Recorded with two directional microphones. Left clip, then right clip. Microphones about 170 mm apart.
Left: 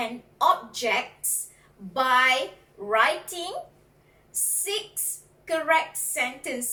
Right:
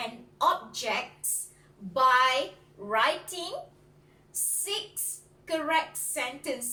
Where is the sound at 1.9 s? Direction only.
15° right (ahead or behind).